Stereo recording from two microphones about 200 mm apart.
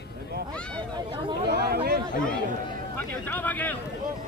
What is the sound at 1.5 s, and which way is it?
Speech, 50° right (ahead or behind).